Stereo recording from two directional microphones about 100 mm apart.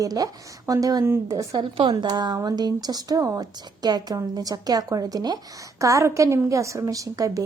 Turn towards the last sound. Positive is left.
turn(degrees=-35)  # may be behind; listen again after turning